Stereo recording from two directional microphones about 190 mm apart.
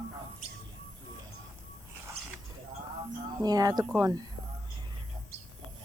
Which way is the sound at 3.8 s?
5° right (ahead or behind).